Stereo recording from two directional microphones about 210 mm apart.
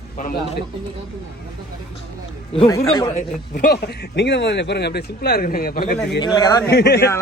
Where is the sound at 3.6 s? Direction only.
55° left (ahead or behind).